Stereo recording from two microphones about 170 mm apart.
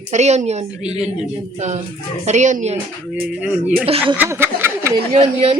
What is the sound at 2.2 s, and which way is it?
Speech, 45° right (ahead or behind).